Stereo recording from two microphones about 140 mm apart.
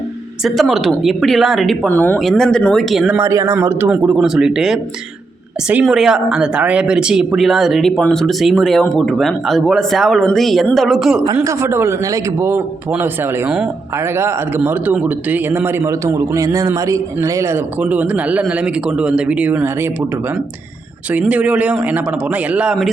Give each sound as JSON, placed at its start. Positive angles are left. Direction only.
{"t": 0.4, "sound": "speech", "side_deg": 0}
{"t": 1.9, "sound": "speech", "side_deg": 15}
{"t": 2.1, "sound": "speech", "side_deg": 5}
{"t": 3.2, "sound": "speech", "side_deg": -20}
{"t": 3.8, "sound": "speech", "side_deg": -5}
{"t": 5.8, "sound": "speech", "side_deg": -5}
{"t": 11.3, "sound": "a man's voice", "side_deg": -20}
{"t": 21.1, "sound": "a man's voice", "side_deg": -10}